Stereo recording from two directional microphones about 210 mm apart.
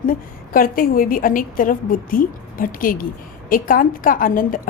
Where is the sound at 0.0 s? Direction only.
40° left (ahead or behind).